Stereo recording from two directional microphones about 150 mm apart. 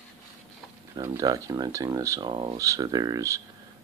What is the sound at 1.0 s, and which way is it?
Speech, 25° right (ahead or behind).